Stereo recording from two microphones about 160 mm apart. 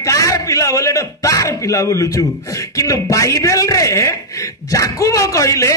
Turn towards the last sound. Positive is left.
turn(degrees=20)  # may be behind; listen again after turning